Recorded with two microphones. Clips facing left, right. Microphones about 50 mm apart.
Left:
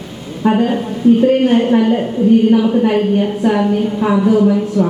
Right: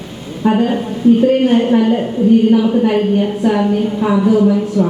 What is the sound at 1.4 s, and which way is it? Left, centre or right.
A woman's voice, left.